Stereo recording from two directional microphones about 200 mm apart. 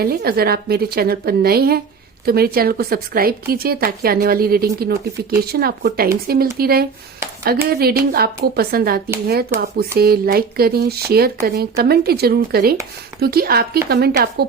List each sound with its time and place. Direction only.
0.0 s speech: 50° right (ahead or behind)